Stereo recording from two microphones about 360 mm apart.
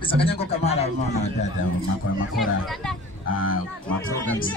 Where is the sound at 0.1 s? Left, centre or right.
Centre.